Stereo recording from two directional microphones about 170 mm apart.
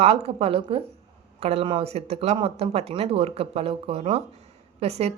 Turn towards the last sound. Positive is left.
turn(degrees=-40)  # may be behind; listen again after turning